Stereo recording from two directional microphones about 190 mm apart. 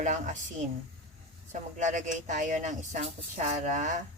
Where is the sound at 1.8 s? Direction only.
40° right (ahead or behind).